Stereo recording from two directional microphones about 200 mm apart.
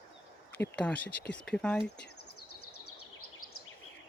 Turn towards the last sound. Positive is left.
turn(degrees=90)